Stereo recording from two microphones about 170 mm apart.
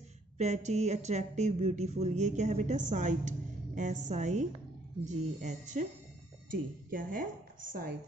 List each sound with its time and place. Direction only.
0.4 s speech: 45° right (ahead or behind)
6.9 s a woman's voice: 55° right (ahead or behind)